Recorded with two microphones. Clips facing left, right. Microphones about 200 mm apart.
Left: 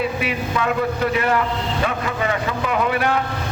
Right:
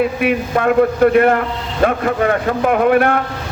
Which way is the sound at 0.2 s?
55° right (ahead or behind).